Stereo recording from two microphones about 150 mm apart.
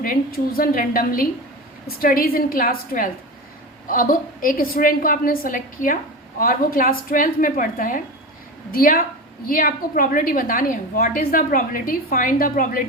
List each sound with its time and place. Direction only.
0.0 s a woman's voice: 70° left (ahead or behind)